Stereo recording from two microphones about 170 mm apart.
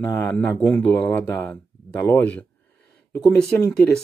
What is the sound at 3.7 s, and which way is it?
Speech, 5° left (ahead or behind).